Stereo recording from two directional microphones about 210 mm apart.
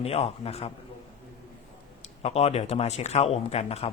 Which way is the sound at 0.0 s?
30° left (ahead or behind).